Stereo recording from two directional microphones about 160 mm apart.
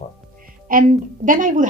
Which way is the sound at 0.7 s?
60° right (ahead or behind).